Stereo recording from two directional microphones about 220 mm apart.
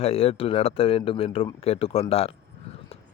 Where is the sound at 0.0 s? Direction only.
25° left (ahead or behind).